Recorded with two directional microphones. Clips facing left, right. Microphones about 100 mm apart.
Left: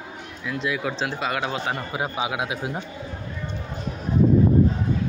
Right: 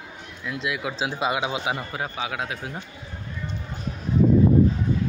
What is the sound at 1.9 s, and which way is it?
Speech, 15° left (ahead or behind).